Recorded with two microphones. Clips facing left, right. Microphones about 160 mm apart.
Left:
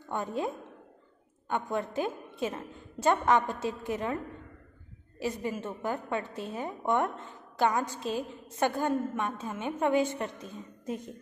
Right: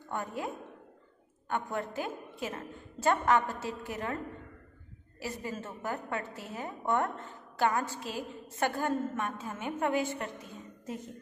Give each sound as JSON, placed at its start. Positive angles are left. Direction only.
{"t": 0.1, "sound": "a woman's voice", "side_deg": 20}
{"t": 1.5, "sound": "a woman's voice", "side_deg": 20}
{"t": 5.2, "sound": "a woman's voice", "side_deg": 20}